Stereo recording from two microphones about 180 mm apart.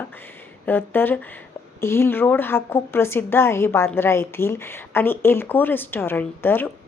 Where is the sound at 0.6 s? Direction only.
10° left (ahead or behind).